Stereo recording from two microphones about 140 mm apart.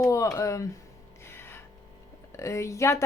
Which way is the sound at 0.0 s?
20° left (ahead or behind).